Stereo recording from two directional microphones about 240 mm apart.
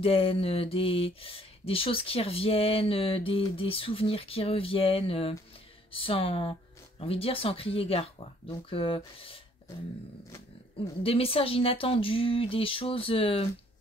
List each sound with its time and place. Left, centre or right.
0.0 s speech: left
11.0 s speech: left